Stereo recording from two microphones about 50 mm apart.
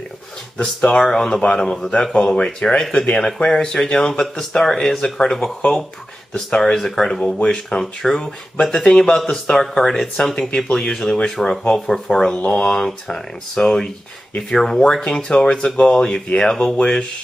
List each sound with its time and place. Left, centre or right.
0.8 s speech: centre
5.6 s speech: centre